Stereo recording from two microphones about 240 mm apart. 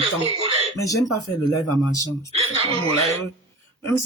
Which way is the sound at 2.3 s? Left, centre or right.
Right.